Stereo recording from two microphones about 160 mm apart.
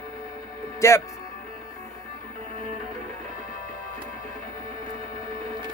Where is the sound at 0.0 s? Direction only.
25° left (ahead or behind).